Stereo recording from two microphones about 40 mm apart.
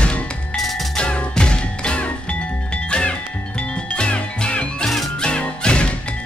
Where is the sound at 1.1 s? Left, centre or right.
Left.